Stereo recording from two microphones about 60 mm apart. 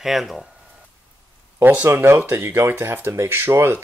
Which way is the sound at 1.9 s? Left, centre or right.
Right.